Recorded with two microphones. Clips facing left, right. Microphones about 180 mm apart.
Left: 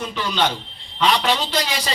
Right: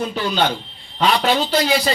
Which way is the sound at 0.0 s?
40° right (ahead or behind).